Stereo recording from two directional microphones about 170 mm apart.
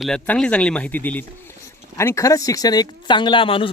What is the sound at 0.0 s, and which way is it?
Speech, 5° left (ahead or behind).